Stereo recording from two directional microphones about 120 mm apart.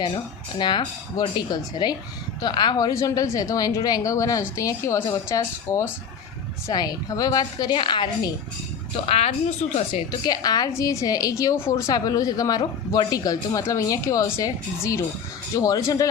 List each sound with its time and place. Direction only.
0.6 s a woman's voice: 40° left (ahead or behind)
9.0 s a woman's voice: 60° left (ahead or behind)
10.1 s a woman's voice: 35° left (ahead or behind)